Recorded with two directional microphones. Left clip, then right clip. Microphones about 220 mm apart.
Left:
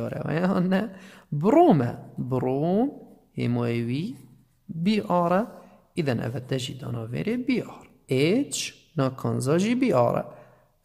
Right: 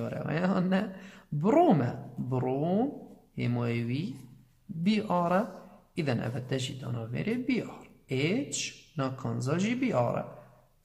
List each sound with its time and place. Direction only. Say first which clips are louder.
0.0 s speech: left 4 dB; 45° left (ahead or behind)